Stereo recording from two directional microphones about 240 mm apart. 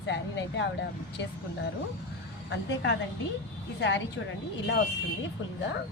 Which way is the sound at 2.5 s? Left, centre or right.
Left.